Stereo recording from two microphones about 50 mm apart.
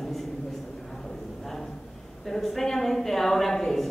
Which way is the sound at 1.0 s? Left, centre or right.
Centre.